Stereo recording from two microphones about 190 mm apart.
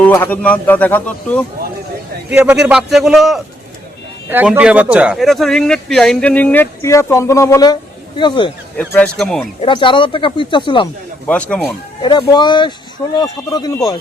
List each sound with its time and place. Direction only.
0.0 s a man's voice: 10° left (ahead or behind)
2.3 s speech: 5° right (ahead or behind); by 8.5 s 25° left (ahead or behind)
8.8 s speech: 5° left (ahead or behind)
9.6 s speech: 25° left (ahead or behind)
11.3 s a man's voice: 5° left (ahead or behind)
12.0 s speech: 20° left (ahead or behind)